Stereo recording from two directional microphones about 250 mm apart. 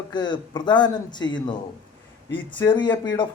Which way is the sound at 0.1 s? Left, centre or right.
Centre.